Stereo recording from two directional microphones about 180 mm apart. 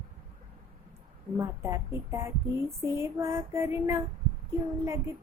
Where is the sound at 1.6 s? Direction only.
15° right (ahead or behind).